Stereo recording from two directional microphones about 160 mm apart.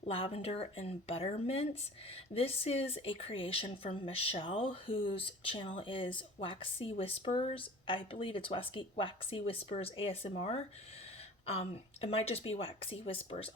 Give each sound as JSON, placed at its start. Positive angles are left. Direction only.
{"t": 0.0, "sound": "speech", "side_deg": 40}